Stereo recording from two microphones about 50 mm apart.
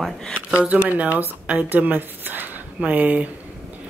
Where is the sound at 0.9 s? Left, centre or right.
Right.